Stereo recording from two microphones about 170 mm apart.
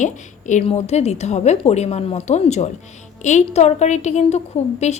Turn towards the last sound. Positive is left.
turn(degrees=40)  # may be behind; listen again after turning